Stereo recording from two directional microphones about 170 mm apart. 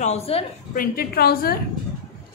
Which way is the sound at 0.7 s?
60° left (ahead or behind).